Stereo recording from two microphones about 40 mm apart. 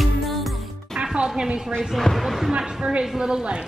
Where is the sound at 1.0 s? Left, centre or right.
Right.